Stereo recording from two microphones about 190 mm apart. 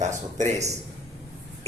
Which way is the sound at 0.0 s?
40° right (ahead or behind).